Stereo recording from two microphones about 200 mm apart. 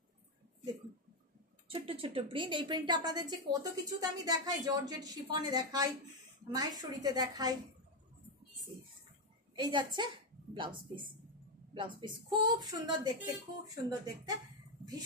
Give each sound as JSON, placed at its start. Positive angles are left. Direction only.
{"t": 1.7, "sound": "a woman's voice", "side_deg": -25}
{"t": 9.6, "sound": "a woman's voice", "side_deg": -20}
{"t": 11.7, "sound": "a woman's voice", "side_deg": -25}